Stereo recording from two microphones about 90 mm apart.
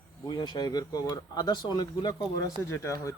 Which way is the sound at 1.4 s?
55° left (ahead or behind).